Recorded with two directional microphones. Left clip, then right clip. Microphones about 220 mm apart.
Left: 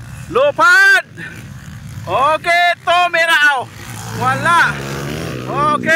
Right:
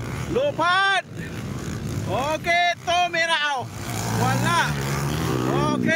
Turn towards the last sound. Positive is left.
turn(degrees=-10)  # may be behind; listen again after turning